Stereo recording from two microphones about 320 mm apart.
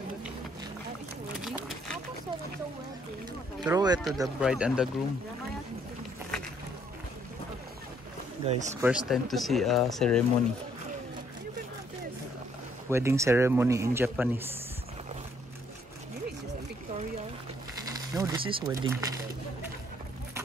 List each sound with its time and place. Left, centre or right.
1.4 s a sound: centre
3.6 s speech: centre
8.5 s speech: right
8.8 s speech: centre
12.9 s speech: centre
17.8 s sewing machine: centre